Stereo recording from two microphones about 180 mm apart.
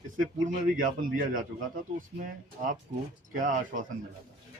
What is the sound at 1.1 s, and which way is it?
Speech, 50° right (ahead or behind).